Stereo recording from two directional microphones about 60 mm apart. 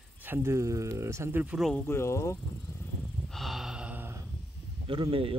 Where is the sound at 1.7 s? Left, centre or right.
Left.